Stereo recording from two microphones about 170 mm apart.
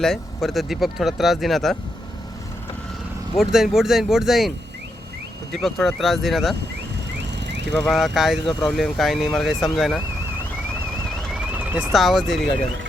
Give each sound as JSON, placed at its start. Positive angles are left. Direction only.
{"t": 0.0, "sound": "speech", "side_deg": 0}
{"t": 3.3, "sound": "speech", "side_deg": 0}
{"t": 7.3, "sound": "a sound", "side_deg": -90}
{"t": 7.8, "sound": "speech", "side_deg": 0}
{"t": 11.3, "sound": "speech", "side_deg": -10}